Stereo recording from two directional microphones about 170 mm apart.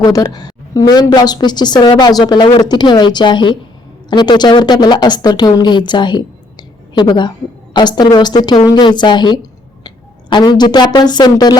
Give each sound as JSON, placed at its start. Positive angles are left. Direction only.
{"t": 0.0, "sound": "speech", "side_deg": 20}